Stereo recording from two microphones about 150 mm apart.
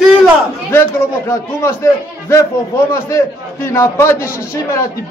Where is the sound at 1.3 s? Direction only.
20° left (ahead or behind).